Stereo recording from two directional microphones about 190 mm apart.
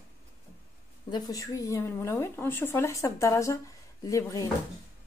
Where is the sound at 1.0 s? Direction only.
20° left (ahead or behind).